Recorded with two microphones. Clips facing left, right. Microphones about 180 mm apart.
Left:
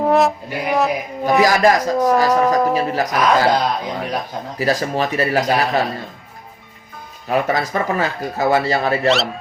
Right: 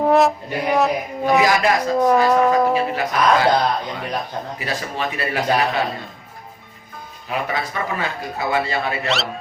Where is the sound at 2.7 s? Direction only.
40° left (ahead or behind).